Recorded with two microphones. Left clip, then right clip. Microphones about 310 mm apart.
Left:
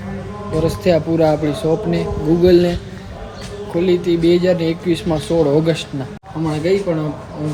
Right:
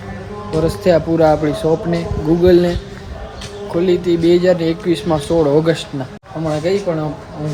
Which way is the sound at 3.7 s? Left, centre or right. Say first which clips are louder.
Right 1 dB; centre.